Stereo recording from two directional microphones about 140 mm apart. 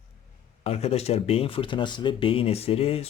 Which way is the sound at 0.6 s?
45° left (ahead or behind).